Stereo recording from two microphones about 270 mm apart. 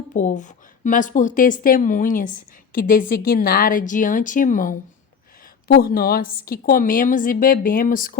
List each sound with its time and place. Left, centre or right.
0.1 s a woman's voice: left